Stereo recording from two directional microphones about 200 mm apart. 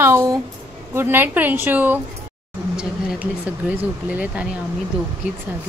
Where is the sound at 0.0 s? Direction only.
15° right (ahead or behind).